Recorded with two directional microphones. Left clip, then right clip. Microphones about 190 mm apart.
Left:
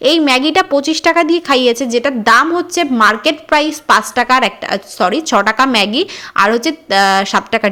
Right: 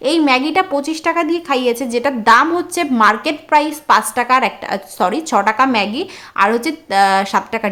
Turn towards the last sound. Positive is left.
turn(degrees=15)  # may be behind; listen again after turning